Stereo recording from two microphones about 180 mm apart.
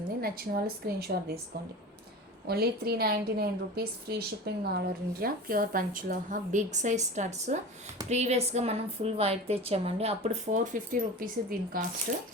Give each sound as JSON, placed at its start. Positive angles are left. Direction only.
{"t": 0.2, "sound": "speech", "side_deg": -55}
{"t": 2.5, "sound": "a woman's voice", "side_deg": -60}